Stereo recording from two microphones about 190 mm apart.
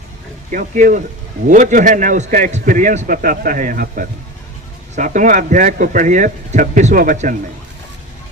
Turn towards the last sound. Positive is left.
turn(degrees=-45)  # may be behind; listen again after turning